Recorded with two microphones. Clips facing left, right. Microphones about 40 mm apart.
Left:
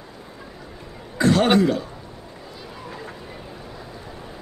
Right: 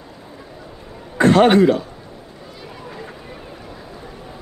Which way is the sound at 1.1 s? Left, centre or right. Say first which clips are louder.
Right 6 dB; right.